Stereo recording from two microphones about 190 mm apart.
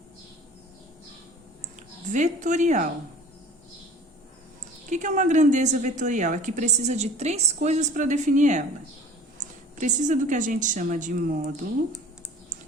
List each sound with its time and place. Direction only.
2.1 s a woman's voice: 40° right (ahead or behind)
4.9 s a woman's voice: 40° right (ahead or behind)
9.7 s a woman's voice: 40° right (ahead or behind)